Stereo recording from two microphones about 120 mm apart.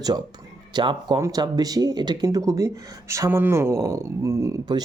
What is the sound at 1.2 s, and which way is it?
Speech, 25° right (ahead or behind).